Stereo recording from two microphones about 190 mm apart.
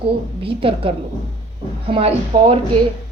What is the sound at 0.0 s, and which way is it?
A woman's voice, 30° right (ahead or behind).